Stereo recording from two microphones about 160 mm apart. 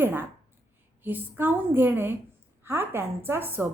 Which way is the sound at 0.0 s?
15° right (ahead or behind).